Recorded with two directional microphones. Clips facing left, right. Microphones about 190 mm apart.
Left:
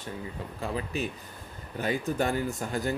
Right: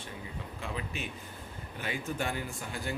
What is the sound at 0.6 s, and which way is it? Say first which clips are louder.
Speech: left 7 dB; 35° left (ahead or behind).